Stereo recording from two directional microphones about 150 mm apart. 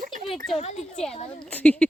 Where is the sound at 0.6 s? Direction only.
50° left (ahead or behind).